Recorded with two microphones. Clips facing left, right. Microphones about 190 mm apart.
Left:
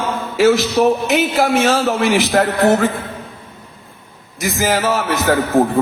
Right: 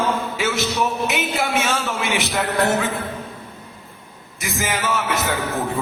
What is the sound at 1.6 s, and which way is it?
A man's voice, 40° left (ahead or behind).